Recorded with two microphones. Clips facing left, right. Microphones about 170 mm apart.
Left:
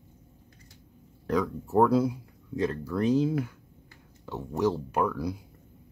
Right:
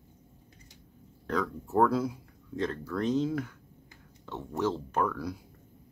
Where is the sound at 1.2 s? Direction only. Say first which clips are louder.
Left 4 dB; 10° left (ahead or behind).